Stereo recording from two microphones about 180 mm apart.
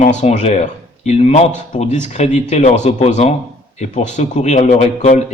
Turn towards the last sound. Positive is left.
turn(degrees=45)  # may be behind; listen again after turning